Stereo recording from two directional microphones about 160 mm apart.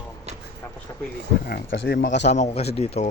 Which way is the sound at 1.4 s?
85° left.